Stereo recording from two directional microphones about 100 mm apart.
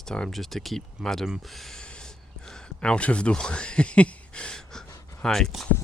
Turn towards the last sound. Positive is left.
turn(degrees=5)  # may be behind; listen again after turning